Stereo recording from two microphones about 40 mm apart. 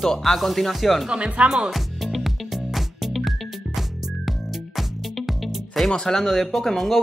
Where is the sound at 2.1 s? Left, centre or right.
Centre.